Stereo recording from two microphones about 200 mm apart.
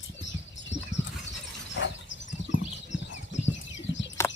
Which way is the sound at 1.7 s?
65° left (ahead or behind).